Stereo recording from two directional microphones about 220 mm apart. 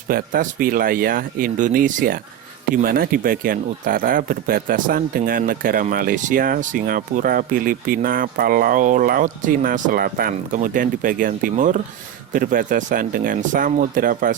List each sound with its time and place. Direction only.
0.1 s speech: 40° right (ahead or behind)